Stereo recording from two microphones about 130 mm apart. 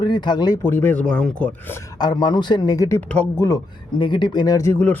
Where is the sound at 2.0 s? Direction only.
35° left (ahead or behind).